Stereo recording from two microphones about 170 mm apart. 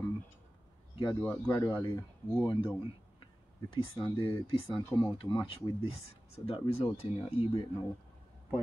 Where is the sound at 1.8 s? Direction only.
20° left (ahead or behind).